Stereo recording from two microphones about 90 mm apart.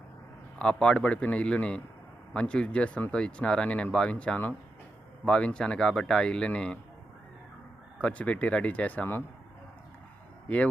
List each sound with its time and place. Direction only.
0.6 s speech: 10° left (ahead or behind)
7.9 s speech: 15° left (ahead or behind)